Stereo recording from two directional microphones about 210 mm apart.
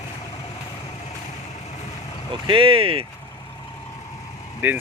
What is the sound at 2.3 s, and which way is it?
Speech, 25° right (ahead or behind).